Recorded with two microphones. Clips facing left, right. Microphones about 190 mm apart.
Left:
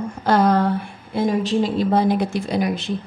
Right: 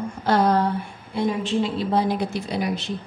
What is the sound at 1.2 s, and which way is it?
A woman's voice, 40° left (ahead or behind).